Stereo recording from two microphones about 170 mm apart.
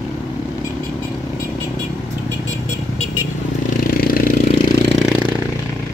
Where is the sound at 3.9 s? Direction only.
60° left (ahead or behind).